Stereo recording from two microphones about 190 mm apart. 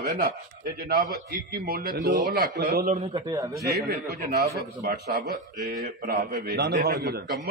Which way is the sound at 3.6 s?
55° right (ahead or behind).